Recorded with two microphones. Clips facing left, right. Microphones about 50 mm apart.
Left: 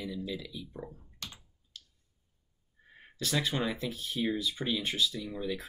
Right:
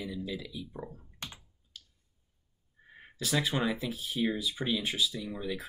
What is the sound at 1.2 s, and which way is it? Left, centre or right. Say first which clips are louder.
Computer keyboard: right 2 dB; centre.